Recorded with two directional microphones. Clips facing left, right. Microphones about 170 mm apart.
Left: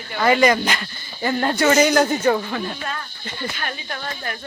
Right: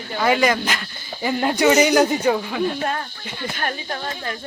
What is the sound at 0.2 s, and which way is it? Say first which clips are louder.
Speech: left 2 dB; centre (ahead or behind).